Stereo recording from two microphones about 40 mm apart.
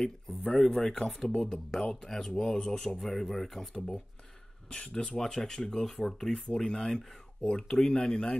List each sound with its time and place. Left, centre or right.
0.5 s speech: centre
4.6 s speech: centre